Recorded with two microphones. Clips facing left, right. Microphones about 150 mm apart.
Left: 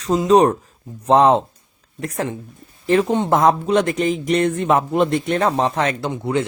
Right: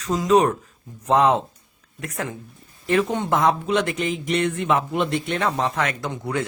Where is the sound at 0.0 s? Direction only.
30° left (ahead or behind).